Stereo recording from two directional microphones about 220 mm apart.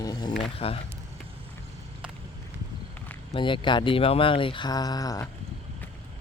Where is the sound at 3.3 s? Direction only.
20° left (ahead or behind).